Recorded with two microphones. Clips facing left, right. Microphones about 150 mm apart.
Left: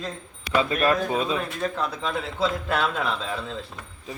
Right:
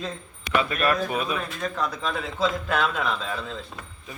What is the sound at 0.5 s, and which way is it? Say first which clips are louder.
A man's voice: left 2 dB; 25° left (ahead or behind).